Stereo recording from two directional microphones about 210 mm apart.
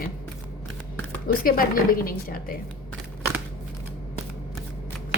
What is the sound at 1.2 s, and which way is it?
Speech, 45° left (ahead or behind).